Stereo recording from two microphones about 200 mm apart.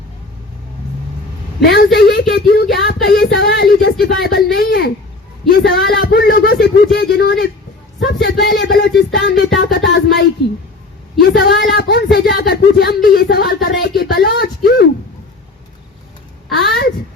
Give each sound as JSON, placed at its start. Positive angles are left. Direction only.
{"t": 1.6, "sound": "speech", "side_deg": 60}
{"t": 5.4, "sound": "a sound", "side_deg": 0}
{"t": 5.9, "sound": "speech", "side_deg": 55}